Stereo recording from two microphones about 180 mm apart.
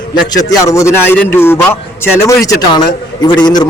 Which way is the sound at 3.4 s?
20° left (ahead or behind).